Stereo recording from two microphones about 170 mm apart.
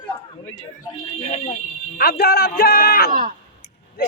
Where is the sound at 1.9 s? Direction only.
65° left (ahead or behind).